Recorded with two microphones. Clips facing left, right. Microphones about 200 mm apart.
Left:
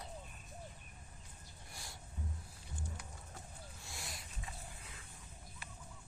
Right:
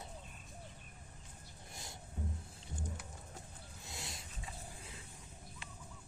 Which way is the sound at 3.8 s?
20° right (ahead or behind).